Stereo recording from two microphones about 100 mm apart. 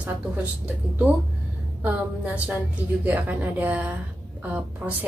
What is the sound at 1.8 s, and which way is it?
A child's voice, 15° right (ahead or behind).